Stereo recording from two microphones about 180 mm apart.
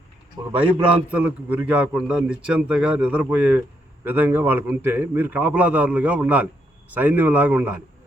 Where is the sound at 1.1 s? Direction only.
10° right (ahead or behind).